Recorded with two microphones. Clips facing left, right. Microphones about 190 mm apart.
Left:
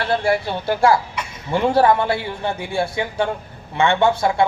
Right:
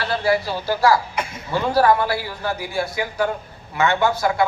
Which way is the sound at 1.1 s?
55° right (ahead or behind).